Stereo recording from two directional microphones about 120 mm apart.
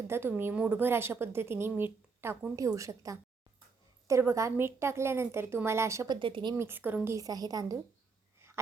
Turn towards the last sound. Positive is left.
turn(degrees=-30)  # may be behind; listen again after turning